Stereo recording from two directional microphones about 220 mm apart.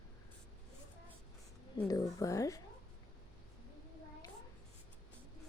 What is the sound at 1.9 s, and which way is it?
Speech, 15° left (ahead or behind).